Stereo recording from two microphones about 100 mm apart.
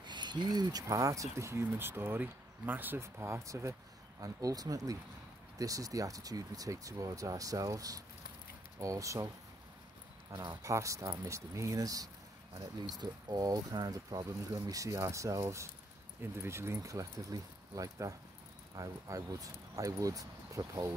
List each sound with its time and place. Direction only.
0.0 s speech: 50° right (ahead or behind); by 9.3 s 30° right (ahead or behind)
10.3 s speech: 30° right (ahead or behind)